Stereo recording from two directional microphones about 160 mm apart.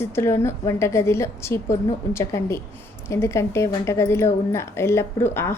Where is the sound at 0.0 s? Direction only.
15° left (ahead or behind).